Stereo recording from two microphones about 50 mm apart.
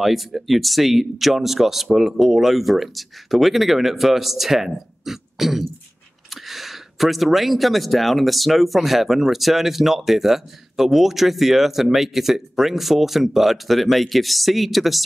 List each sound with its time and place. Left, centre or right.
0.0 s speech: centre